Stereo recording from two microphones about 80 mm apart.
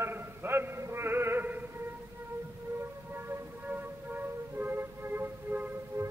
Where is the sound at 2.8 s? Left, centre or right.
Right.